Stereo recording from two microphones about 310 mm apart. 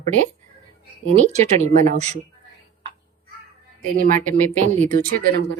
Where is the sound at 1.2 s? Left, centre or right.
Right.